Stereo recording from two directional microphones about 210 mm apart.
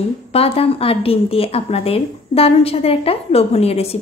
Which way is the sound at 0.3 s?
30° left (ahead or behind).